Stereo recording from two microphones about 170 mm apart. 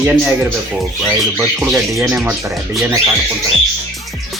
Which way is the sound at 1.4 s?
5° right (ahead or behind).